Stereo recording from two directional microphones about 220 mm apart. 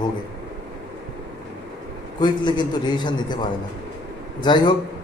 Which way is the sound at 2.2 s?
20° left (ahead or behind).